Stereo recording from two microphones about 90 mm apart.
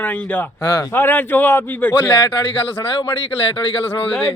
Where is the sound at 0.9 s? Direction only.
20° left (ahead or behind).